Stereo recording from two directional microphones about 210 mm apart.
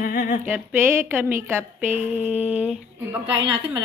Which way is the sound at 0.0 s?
45° left (ahead or behind).